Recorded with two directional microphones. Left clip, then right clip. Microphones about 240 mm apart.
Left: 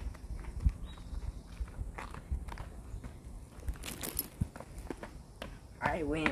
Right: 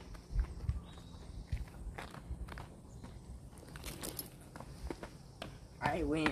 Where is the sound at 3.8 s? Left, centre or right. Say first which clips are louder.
Left 3 dB; left.